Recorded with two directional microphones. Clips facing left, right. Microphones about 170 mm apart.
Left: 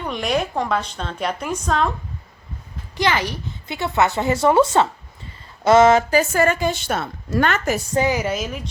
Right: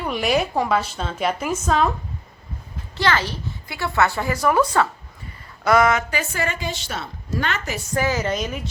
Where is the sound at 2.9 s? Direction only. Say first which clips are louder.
Left 1 dB; 15° left (ahead or behind).